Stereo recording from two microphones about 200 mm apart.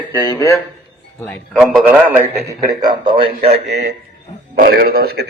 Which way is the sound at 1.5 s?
5° right (ahead or behind).